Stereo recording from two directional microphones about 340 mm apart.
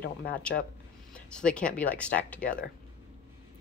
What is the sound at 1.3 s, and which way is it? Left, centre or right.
A woman's voice, centre.